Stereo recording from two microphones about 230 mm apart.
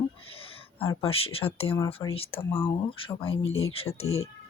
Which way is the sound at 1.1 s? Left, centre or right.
Left.